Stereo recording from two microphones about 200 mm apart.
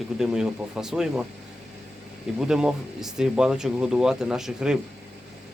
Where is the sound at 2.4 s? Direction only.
5° right (ahead or behind).